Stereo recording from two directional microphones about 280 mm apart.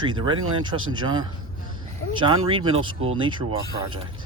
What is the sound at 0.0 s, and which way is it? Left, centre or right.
Speech, centre.